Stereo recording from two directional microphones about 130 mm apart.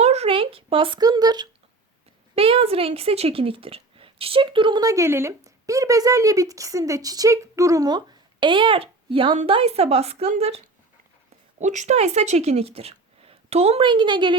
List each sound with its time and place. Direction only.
0.0 s a sound: 55° right (ahead or behind); by 1.5 s 30° right (ahead or behind)
2.3 s speech: 45° right (ahead or behind)
11.6 s a woman's voice: 65° right (ahead or behind); by 14.3 s 40° right (ahead or behind)